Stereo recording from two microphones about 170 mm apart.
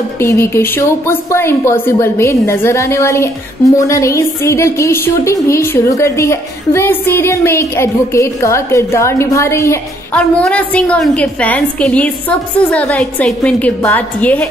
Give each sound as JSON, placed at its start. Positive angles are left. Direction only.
{"t": 0.2, "sound": "a woman's voice", "side_deg": 15}